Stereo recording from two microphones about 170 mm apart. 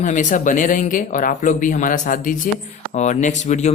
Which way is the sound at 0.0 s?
45° left (ahead or behind).